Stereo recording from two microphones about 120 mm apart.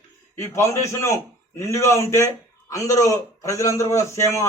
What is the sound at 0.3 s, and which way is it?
A man's voice, 25° left (ahead or behind).